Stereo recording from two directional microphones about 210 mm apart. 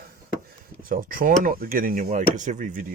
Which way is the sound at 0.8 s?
45° right (ahead or behind).